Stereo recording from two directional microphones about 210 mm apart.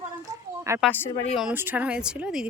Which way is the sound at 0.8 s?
10° left (ahead or behind).